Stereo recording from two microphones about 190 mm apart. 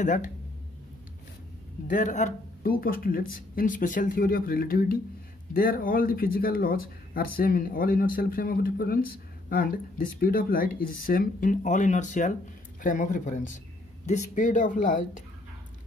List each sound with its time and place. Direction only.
0.0 s speech: 40° left (ahead or behind)
1.9 s speech: 40° left (ahead or behind)